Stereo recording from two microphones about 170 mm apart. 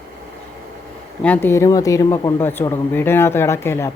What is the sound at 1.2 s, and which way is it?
Speech, 10° left (ahead or behind).